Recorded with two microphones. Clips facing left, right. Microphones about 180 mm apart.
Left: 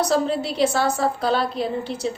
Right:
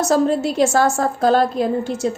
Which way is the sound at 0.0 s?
45° right (ahead or behind).